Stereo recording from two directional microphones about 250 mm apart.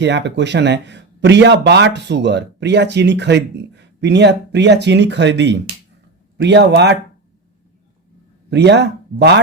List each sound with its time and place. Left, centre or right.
0.0 s speech: right
8.4 s speech: right